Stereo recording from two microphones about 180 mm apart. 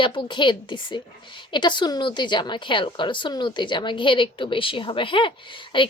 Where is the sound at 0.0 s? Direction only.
25° left (ahead or behind).